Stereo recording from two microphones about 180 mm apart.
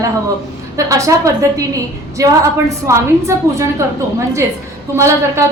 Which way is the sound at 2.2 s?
20° right (ahead or behind).